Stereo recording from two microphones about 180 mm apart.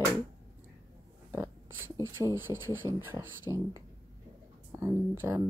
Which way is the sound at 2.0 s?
15° right (ahead or behind).